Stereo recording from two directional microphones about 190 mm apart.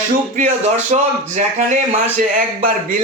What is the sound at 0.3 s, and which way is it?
A man's voice, 35° right (ahead or behind).